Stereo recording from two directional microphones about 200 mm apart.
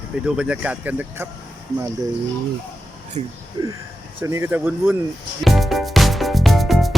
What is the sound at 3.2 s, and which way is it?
Speech, 30° right (ahead or behind).